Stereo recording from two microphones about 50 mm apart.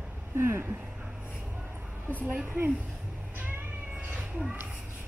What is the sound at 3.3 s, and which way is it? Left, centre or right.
Music, right.